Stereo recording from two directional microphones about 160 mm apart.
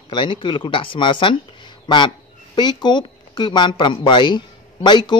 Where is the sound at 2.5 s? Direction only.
30° left (ahead or behind).